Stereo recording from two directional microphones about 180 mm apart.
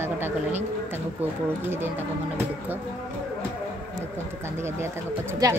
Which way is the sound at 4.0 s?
15° right (ahead or behind).